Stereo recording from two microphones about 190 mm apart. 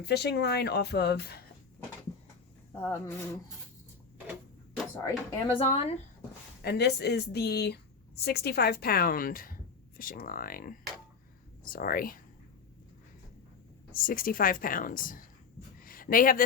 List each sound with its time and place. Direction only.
0.0 s a woman's voice: 60° left (ahead or behind)
2.8 s speech: 15° left (ahead or behind)
5.0 s speech: 25° left (ahead or behind)
6.6 s a woman's voice: 60° left (ahead or behind)
13.9 s speech: 50° left (ahead or behind)
15.8 s a sound: 50° left (ahead or behind)